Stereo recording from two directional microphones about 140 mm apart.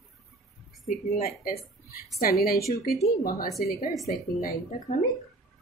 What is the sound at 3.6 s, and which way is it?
Speech, 90° left.